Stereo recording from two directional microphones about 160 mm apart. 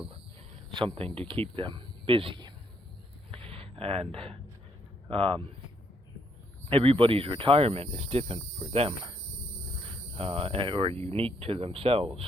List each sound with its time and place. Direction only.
0.7 s speech: 30° right (ahead or behind)
3.3 s a sound: 35° right (ahead or behind)
5.0 s speech: 35° right (ahead or behind)
6.7 s speech: 35° right (ahead or behind)